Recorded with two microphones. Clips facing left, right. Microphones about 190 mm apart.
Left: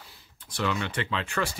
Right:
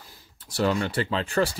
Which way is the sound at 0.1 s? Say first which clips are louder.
Right 3 dB; 40° right (ahead or behind).